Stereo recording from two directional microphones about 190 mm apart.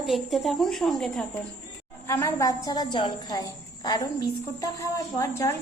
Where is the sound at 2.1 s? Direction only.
15° left (ahead or behind).